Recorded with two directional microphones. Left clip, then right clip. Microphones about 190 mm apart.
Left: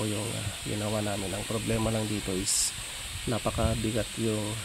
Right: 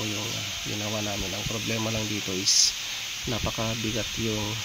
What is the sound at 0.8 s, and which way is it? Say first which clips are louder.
Speech: left 1 dB; 10° left (ahead or behind).